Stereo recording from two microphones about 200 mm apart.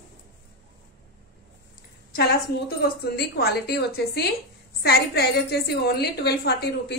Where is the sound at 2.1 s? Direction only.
50° left (ahead or behind).